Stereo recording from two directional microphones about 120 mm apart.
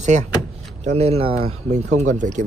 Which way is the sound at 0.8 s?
65° right (ahead or behind).